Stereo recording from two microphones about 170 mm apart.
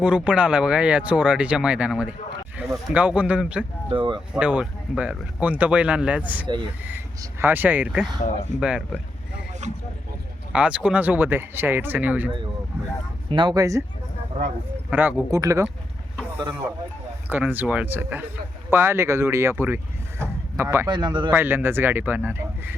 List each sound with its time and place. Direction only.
0.0 s speech: 5° right (ahead or behind)
3.9 s speech: 30° right (ahead or behind)
4.4 s speech: 5° right (ahead or behind)
8.5 s speech: 45° right (ahead or behind)
10.5 s speech: 5° right (ahead or behind)
13.3 s speech: 25° right (ahead or behind)
14.8 s speech: 10° right (ahead or behind); by 21.2 s 25° right (ahead or behind)
21.2 s speech: 10° right (ahead or behind)